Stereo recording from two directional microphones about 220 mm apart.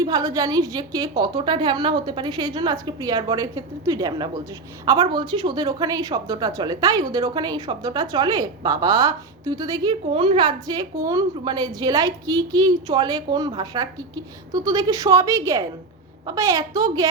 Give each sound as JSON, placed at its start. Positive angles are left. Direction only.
{"t": 0.0, "sound": "a woman's voice", "side_deg": -15}